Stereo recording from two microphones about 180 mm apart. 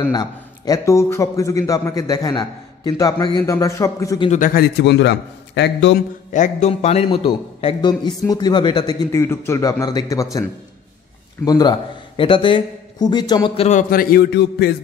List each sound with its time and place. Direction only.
0.1 s a man's voice: 20° left (ahead or behind)
4.3 s a man's voice: 50° left (ahead or behind); by 5.9 s 85° left
5.9 s a man's voice: 45° left (ahead or behind); by 8.9 s 25° left (ahead or behind)
9.1 s a man's voice: 15° left (ahead or behind)
11.4 s a man's voice: 20° left (ahead or behind)
13.7 s a man's voice: 50° left (ahead or behind); by 14.8 s 65° left (ahead or behind)